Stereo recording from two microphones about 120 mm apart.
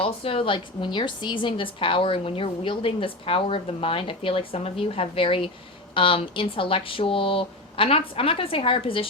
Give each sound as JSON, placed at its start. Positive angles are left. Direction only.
{"t": 0.0, "sound": "a woman's voice", "side_deg": 50}